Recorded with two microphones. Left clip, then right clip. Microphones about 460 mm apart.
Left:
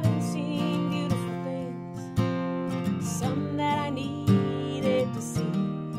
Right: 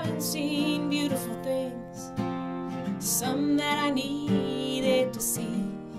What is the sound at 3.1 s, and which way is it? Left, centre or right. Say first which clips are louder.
Music: right 8 dB; right.